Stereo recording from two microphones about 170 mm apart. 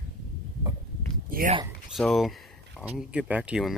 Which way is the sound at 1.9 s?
Centre (ahead or behind).